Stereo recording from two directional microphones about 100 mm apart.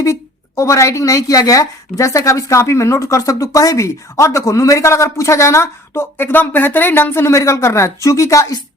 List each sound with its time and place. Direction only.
0.0 s a woman's voice: 30° left (ahead or behind)